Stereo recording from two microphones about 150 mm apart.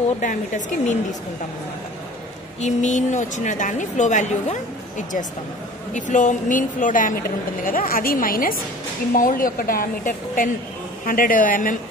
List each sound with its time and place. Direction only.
0.2 s speech: 55° left (ahead or behind)
2.6 s a woman's voice: 55° left (ahead or behind)